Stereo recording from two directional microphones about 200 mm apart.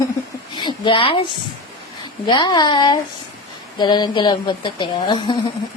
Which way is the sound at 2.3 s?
20° left (ahead or behind).